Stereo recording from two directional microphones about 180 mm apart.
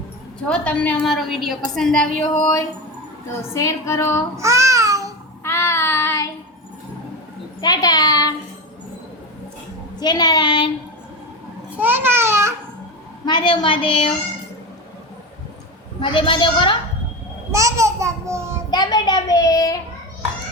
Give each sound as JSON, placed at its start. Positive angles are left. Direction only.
{"t": 0.4, "sound": "a woman's voice", "side_deg": 5}
{"t": 2.4, "sound": "female singing", "side_deg": 15}
{"t": 4.4, "sound": "babbling", "side_deg": -15}
{"t": 5.4, "sound": "child singing", "side_deg": 10}
{"t": 7.6, "sound": "a sound", "side_deg": 20}
{"t": 10.0, "sound": "a child's voice", "side_deg": 25}
{"t": 11.8, "sound": "babbling", "side_deg": -10}
{"t": 13.2, "sound": "a child's voice", "side_deg": 25}
{"t": 16.0, "sound": "a child's voice", "side_deg": 30}
{"t": 17.5, "sound": "babbling", "side_deg": -15}
{"t": 18.7, "sound": "a child's voice", "side_deg": 25}